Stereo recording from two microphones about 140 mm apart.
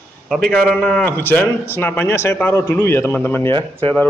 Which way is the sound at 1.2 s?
15° left (ahead or behind).